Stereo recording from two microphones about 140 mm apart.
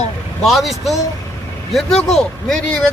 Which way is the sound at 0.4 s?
Centre (ahead or behind).